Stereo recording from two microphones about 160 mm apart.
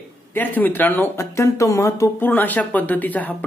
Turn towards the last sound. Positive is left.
turn(degrees=10)  # may be behind; listen again after turning